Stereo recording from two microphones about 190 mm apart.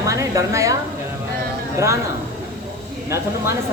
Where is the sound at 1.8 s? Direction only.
15° right (ahead or behind).